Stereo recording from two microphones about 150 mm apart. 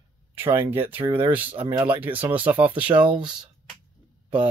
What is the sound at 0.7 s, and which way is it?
Speech, 15° right (ahead or behind).